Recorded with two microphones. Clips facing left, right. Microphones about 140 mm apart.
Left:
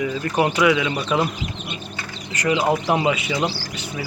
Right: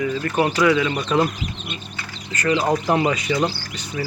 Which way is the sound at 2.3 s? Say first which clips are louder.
Even; 15° left (ahead or behind).